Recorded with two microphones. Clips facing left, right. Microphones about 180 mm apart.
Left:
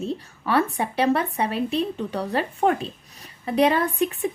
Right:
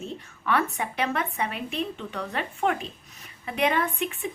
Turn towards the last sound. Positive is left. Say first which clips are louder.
# left 5 dB
turn(degrees=35)  # may be behind; listen again after turning